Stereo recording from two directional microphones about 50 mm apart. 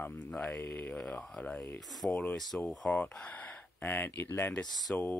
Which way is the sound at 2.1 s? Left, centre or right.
Left.